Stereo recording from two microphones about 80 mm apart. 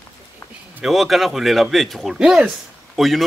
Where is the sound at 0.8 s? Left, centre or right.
Centre.